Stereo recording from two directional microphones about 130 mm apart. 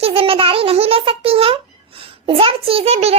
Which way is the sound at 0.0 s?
45° right (ahead or behind).